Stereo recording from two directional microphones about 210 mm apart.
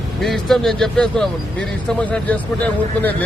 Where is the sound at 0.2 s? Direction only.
Centre (ahead or behind).